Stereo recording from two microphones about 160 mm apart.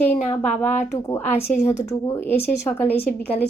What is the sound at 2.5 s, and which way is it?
Speech, 10° left (ahead or behind).